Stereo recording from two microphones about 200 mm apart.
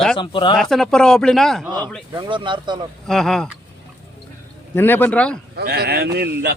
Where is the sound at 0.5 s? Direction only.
Centre (ahead or behind).